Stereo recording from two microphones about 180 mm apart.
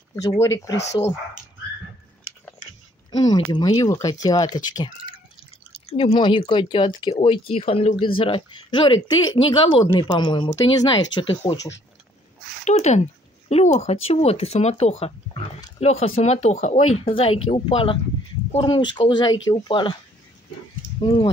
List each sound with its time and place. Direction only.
0.4 s speech: 20° left (ahead or behind)
3.1 s speech: 25° left (ahead or behind)
5.7 s speech: 35° left (ahead or behind)
12.6 s speech: 40° left (ahead or behind)
21.0 s speech: 30° left (ahead or behind)